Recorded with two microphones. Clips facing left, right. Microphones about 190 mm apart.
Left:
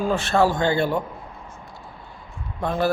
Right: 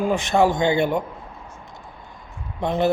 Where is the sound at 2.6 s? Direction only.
20° right (ahead or behind).